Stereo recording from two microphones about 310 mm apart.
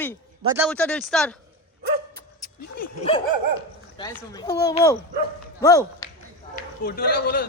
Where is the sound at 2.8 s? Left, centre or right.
Centre.